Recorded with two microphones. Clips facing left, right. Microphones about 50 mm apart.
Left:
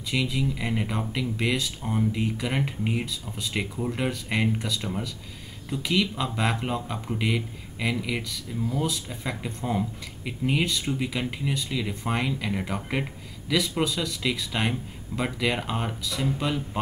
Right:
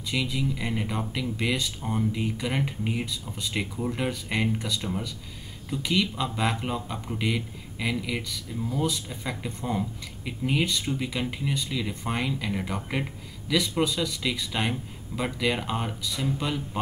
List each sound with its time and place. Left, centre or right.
0.1 s speech: centre